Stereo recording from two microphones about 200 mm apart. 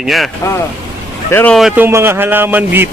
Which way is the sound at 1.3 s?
10° left (ahead or behind).